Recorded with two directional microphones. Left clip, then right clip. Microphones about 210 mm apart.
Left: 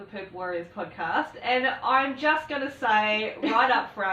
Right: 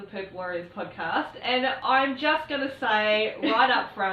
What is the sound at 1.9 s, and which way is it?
Speech, 10° right (ahead or behind).